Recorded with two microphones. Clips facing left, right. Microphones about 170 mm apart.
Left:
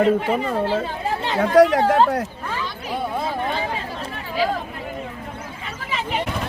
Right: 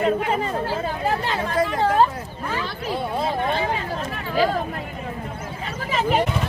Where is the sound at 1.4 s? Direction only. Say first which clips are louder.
Left 12 dB; 85° left.